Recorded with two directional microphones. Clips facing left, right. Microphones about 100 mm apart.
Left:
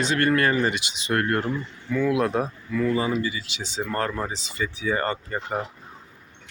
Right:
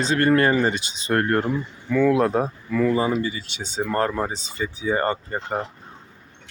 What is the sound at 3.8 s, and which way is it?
Speech, 30° right (ahead or behind).